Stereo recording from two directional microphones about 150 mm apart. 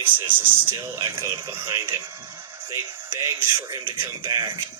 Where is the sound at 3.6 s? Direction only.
30° right (ahead or behind).